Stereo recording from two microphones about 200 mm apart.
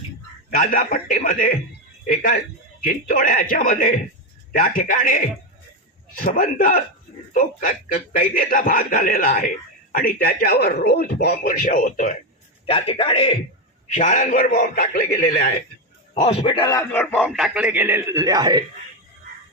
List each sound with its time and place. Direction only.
0.6 s a man's voice: 45° left (ahead or behind)
6.2 s a man's voice: 40° left (ahead or behind)
12.6 s a man's voice: 30° left (ahead or behind); by 15.0 s 45° left (ahead or behind)
16.1 s a man's voice: 25° left (ahead or behind); by 17.2 s 10° left (ahead or behind)
17.2 s a man's voice: 5° right (ahead or behind); by 18.6 s 20° right (ahead or behind)